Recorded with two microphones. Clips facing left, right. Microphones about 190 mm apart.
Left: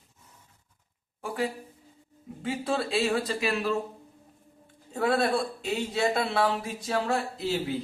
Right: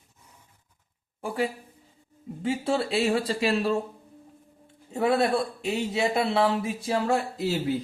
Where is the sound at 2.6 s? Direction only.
25° right (ahead or behind).